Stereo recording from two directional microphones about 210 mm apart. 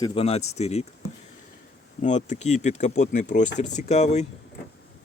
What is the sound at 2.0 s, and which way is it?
Speech, 35° left (ahead or behind).